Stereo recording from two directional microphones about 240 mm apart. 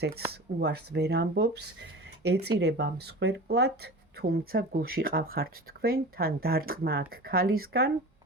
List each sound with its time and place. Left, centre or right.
0.3 s speech: right